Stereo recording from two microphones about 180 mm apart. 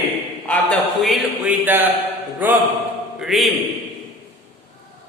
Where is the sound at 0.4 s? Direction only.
5° left (ahead or behind).